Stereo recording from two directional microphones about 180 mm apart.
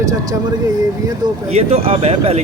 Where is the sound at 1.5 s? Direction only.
35° right (ahead or behind).